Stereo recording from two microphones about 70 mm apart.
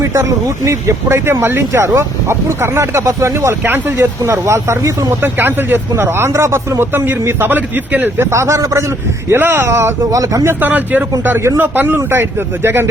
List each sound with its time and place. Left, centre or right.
0.0 s speech: right
4.2 s speech: right
5.2 s speech: right
8.3 s speech: right
9.3 s speech: right
10.1 s speech: right
10.6 s speech: right